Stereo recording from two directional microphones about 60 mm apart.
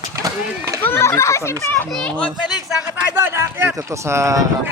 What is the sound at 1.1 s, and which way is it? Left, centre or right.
Speech, left.